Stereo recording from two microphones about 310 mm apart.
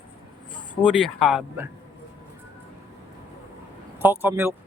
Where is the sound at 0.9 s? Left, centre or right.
Centre.